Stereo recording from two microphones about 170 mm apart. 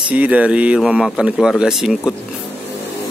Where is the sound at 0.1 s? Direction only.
10° right (ahead or behind).